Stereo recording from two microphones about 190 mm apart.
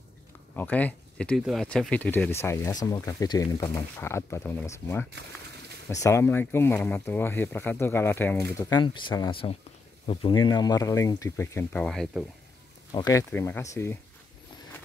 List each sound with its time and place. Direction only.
0.6 s speech: 10° left (ahead or behind)
12.9 s speech: 20° left (ahead or behind)